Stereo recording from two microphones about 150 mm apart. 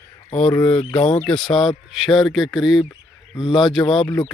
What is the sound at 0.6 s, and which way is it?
Speech, 35° left (ahead or behind).